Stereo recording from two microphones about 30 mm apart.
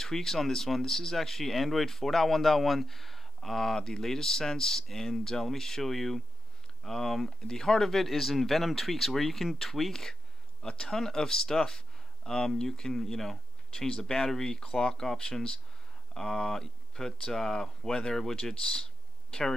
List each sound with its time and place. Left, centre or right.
0.0 s speech: centre
3.3 s speech: centre
8.0 s speech: centre
10.7 s speech: left
13.7 s speech: left